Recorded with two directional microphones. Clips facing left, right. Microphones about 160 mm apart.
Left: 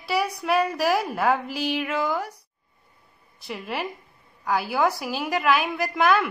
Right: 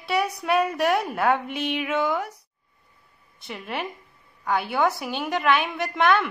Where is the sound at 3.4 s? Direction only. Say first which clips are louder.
Left 1 dB; centre (ahead or behind).